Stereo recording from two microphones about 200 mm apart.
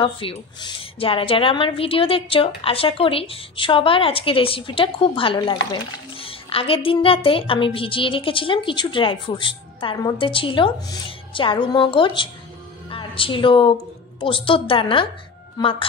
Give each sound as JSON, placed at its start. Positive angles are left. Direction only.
{"t": 0.0, "sound": "a woman's voice", "side_deg": 25}